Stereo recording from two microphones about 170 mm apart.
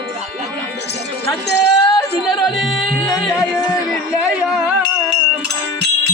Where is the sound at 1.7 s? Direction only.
20° left (ahead or behind).